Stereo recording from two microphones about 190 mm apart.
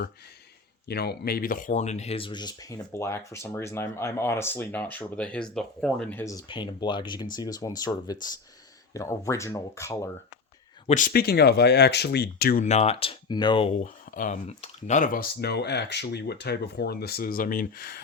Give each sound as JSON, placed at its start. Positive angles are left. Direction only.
{"t": 0.9, "sound": "speech", "side_deg": 55}
{"t": 10.8, "sound": "speech", "side_deg": 45}
{"t": 12.6, "sound": "speech", "side_deg": 35}
{"t": 13.8, "sound": "speech", "side_deg": 45}